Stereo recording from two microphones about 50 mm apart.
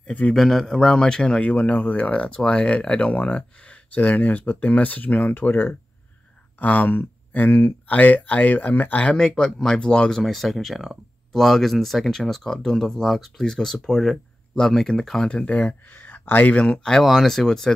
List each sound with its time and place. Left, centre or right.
0.0 s a man's voice: left
0.3 s speech: centre
1.4 s speech: left
9.1 s speech: centre
10.2 s speech: centre
15.4 s speech: left
16.0 s a sound: left
16.7 s speech: centre
17.0 s speech: centre